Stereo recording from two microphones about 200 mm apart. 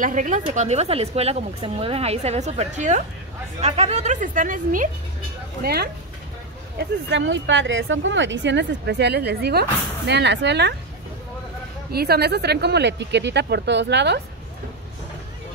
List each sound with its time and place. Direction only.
0.0 s speech: 40° right (ahead or behind)
5.6 s speech: 50° right (ahead or behind)
6.8 s speech: 65° right (ahead or behind)
11.9 s speech: 50° right (ahead or behind)